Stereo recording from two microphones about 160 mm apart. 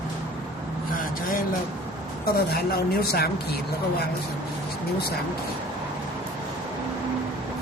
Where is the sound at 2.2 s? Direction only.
75° left (ahead or behind).